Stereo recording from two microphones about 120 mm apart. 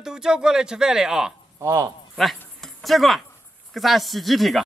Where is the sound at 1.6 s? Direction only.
25° right (ahead or behind).